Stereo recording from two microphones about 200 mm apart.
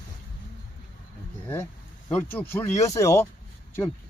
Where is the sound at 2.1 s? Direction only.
10° left (ahead or behind).